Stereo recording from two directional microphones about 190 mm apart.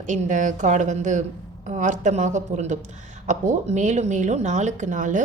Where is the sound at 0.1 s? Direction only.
40° right (ahead or behind).